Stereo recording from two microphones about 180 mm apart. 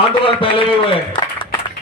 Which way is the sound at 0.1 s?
30° left (ahead or behind).